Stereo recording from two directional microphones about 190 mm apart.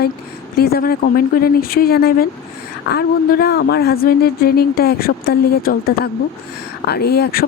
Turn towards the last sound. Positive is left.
turn(degrees=55)  # may be behind; listen again after turning